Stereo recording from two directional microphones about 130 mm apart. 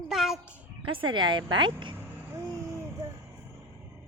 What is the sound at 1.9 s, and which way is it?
Vehicle, 20° right (ahead or behind).